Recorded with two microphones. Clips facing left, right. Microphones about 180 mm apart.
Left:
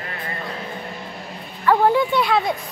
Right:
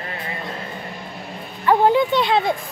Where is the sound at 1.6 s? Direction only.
20° right (ahead or behind).